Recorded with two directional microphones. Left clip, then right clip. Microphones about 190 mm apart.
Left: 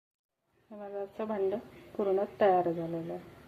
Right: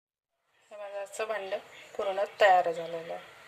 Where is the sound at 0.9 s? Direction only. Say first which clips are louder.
Right 2 dB; 15° right (ahead or behind).